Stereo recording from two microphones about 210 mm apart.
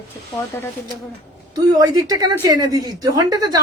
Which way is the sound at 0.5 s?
10° left (ahead or behind).